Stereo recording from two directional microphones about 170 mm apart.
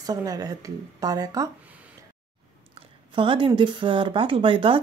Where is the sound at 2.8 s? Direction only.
30° right (ahead or behind).